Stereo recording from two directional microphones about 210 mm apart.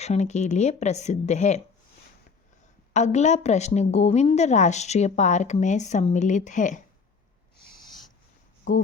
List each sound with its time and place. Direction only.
0.0 s a woman's voice: 30° left (ahead or behind)
2.9 s a woman's voice: 35° left (ahead or behind)
8.7 s a woman's voice: 35° left (ahead or behind)